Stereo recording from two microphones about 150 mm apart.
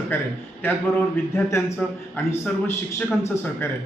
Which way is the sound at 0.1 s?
15° left (ahead or behind).